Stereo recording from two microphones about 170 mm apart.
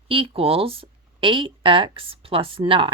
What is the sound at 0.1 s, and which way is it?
Speech, 35° right (ahead or behind).